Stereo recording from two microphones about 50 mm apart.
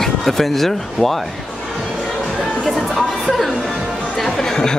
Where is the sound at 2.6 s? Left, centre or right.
Centre.